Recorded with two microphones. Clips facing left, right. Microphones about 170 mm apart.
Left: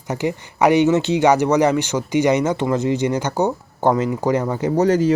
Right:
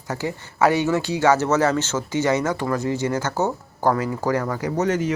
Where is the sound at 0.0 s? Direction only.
20° left (ahead or behind).